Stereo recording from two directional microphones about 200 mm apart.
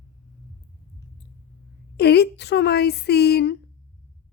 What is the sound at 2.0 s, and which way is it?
A woman's voice, 55° left (ahead or behind).